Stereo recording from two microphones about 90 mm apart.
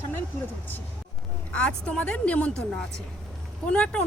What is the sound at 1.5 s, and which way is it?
Speech, 10° left (ahead or behind).